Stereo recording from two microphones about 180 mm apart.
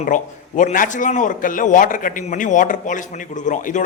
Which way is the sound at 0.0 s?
45° left (ahead or behind).